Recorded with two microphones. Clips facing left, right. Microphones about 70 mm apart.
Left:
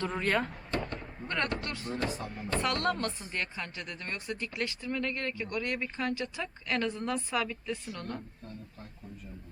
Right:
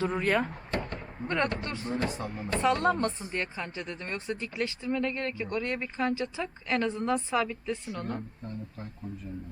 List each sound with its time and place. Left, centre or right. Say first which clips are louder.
0.0 s speech: right 3 dB; centre
0.7 s chop: right 1 dB; right
0.9 s a sound: right 4 dB; centre
1.6 s speech: right 3 dB; right